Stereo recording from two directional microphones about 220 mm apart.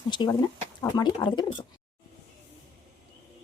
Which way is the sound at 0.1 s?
20° left (ahead or behind).